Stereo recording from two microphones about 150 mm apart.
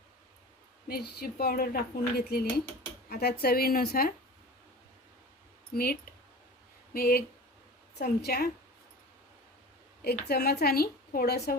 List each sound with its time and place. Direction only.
0.9 s a woman's voice: 90° left
5.7 s speech: 90° left
10.0 s speech: 90° left